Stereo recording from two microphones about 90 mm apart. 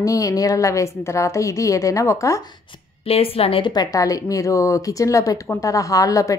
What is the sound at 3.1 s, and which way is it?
Speech, 90° left.